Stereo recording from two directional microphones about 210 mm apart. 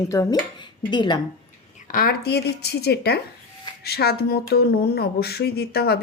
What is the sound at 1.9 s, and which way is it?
Speech, 45° left (ahead or behind).